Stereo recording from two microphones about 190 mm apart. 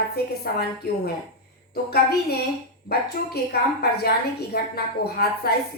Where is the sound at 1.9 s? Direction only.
55° left (ahead or behind).